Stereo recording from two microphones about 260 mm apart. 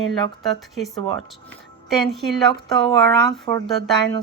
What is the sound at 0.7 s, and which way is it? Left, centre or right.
A woman's voice, centre.